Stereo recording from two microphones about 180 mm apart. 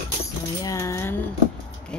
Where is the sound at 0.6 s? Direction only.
20° left (ahead or behind).